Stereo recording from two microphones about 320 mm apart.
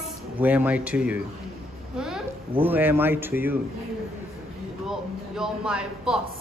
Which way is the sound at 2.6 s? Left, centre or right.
Centre.